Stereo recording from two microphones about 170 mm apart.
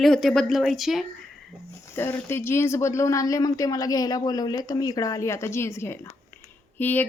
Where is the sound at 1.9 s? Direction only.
15° left (ahead or behind).